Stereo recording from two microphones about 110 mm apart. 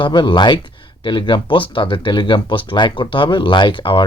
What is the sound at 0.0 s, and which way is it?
Speech, 45° left (ahead or behind).